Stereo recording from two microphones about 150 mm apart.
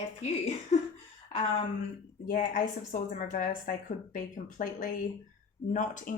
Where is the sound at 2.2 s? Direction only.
65° left (ahead or behind).